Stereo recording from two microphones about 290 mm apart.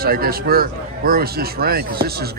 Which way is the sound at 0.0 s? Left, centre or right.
Right.